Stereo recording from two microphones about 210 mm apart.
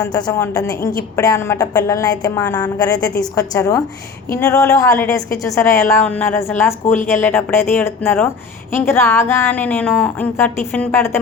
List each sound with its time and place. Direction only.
0.0 s a woman's voice: 20° left (ahead or behind)